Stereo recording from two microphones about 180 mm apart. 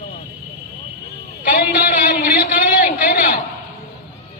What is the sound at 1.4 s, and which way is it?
Speech, 50° left (ahead or behind).